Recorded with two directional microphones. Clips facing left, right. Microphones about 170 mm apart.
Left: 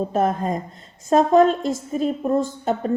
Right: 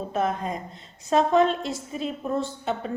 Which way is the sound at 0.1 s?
45° left (ahead or behind).